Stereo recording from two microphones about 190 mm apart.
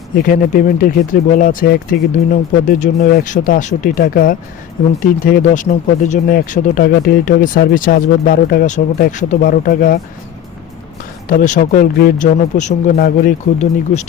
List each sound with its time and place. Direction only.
0.2 s speech: 45° left (ahead or behind)
11.3 s speech: 45° left (ahead or behind)
12.3 s speech: 40° left (ahead or behind)